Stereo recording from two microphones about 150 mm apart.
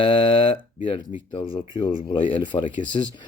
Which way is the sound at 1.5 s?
35° left (ahead or behind).